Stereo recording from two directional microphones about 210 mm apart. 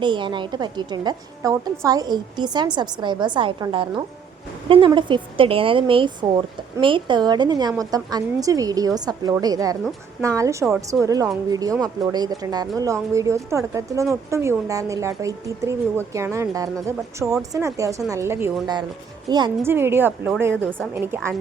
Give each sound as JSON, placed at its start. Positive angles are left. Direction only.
{"t": 0.0, "sound": "speech", "side_deg": -20}